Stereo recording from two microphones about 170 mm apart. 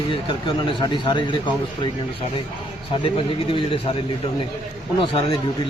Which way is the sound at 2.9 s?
30° left (ahead or behind).